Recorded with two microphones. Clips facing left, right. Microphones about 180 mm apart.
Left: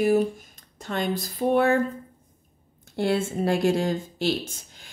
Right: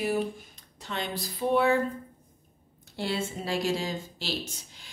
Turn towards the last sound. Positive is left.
turn(degrees=55)  # may be behind; listen again after turning